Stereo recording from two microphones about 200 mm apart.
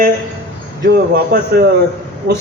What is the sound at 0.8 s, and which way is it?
Speech, 55° right (ahead or behind).